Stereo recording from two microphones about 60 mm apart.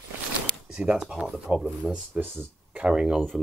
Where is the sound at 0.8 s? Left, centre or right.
Centre.